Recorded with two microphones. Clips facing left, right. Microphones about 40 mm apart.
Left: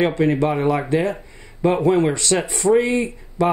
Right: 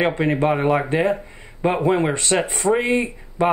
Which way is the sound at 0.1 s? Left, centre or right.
Right.